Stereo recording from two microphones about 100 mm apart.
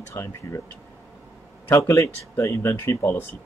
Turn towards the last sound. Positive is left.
turn(degrees=25)  # may be behind; listen again after turning